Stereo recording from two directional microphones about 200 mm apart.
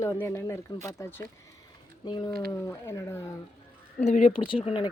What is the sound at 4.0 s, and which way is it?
Speech, 35° left (ahead or behind).